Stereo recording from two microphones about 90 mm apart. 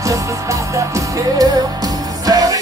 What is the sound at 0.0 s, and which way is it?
Music, 35° right (ahead or behind).